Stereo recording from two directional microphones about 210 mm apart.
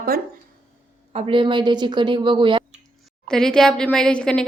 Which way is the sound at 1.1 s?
25° right (ahead or behind).